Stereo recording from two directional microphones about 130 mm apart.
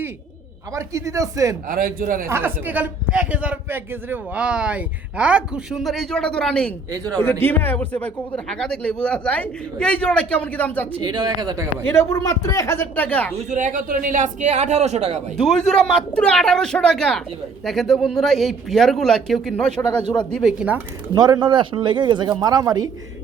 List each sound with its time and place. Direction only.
0.7 s speech: 25° right (ahead or behind)
1.6 s speech: 90° right
2.2 s a man's voice: 15° right (ahead or behind); by 6.7 s 5° left (ahead or behind)
6.9 s speech: 30° right (ahead or behind)
7.2 s speech: 15° left (ahead or behind)
11.0 s speech: 30° right (ahead or behind)
11.8 s speech: 25° left (ahead or behind)
13.3 s speech: 65° right (ahead or behind)
15.4 s speech: 5° left (ahead or behind)
20.0 s speech: 35° left (ahead or behind)
20.3 s a man's voice: 5° right (ahead or behind)
21.1 s speech: 30° right (ahead or behind)